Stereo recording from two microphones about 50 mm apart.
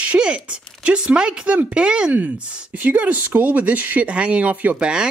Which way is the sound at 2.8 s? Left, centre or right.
Right.